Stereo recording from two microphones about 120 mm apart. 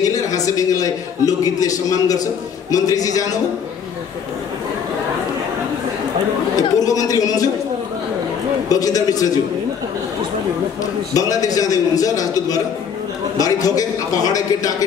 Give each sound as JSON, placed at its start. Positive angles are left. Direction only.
{"t": 0.1, "sound": "a man's voice", "side_deg": 30}
{"t": 6.5, "sound": "a man's voice", "side_deg": 30}
{"t": 8.6, "sound": "a man's voice", "side_deg": 30}
{"t": 11.1, "sound": "a man's voice", "side_deg": 30}